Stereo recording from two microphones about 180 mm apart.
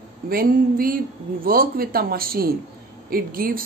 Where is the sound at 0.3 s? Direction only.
55° right (ahead or behind).